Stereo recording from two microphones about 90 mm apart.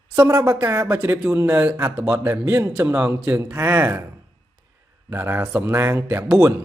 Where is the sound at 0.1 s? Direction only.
35° right (ahead or behind).